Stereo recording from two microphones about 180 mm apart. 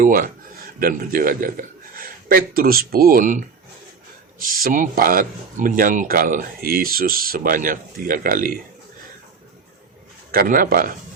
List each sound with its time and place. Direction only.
0.0 s a man's voice: 50° right (ahead or behind)
10.3 s speech: 50° right (ahead or behind)